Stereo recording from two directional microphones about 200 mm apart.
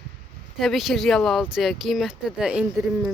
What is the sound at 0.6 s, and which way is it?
Speech, centre (ahead or behind).